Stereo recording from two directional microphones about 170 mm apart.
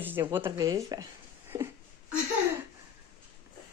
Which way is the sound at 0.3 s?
15° right (ahead or behind).